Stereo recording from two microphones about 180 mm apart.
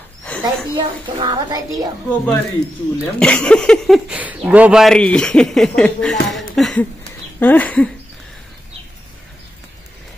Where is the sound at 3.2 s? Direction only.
5° left (ahead or behind).